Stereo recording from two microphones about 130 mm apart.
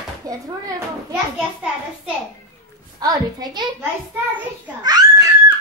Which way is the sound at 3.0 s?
30° right (ahead or behind).